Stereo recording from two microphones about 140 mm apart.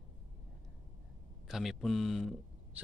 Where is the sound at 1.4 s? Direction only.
Centre (ahead or behind).